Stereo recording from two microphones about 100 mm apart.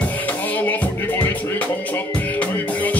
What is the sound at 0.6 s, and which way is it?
Music, 15° left (ahead or behind).